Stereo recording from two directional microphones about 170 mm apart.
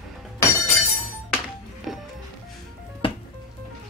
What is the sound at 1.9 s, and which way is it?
Music, centre (ahead or behind).